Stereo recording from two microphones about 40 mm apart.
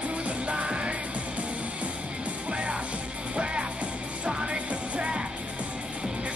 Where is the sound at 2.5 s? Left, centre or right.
Right.